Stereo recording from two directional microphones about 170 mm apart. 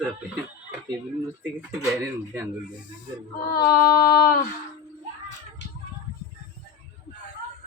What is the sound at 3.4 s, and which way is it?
Female singing, 65° left (ahead or behind).